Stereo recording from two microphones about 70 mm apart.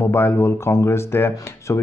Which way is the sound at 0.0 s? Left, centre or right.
Left.